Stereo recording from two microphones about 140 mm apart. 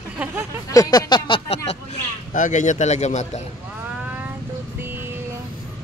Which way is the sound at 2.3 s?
65° left (ahead or behind).